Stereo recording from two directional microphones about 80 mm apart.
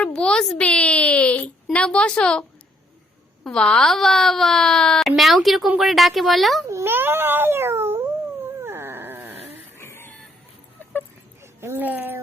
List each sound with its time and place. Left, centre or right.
0.0 s a sound: centre
1.7 s speech: centre
3.4 s speech: centre
6.7 s cat: right
8.6 s dog: right
9.7 s a sound: left
11.6 s speech: right